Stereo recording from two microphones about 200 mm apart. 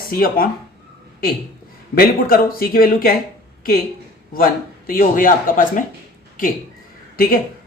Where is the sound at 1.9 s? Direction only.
45° left (ahead or behind).